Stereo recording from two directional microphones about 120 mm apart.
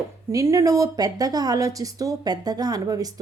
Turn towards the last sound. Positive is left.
turn(degrees=-30)  # may be behind; listen again after turning